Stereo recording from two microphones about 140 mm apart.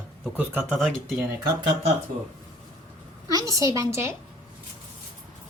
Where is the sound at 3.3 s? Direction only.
25° right (ahead or behind).